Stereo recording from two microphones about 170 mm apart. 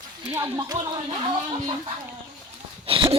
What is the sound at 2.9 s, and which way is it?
Dog, 35° right (ahead or behind).